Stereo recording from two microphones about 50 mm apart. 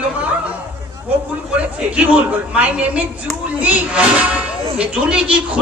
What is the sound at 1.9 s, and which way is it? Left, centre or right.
A man's voice, right.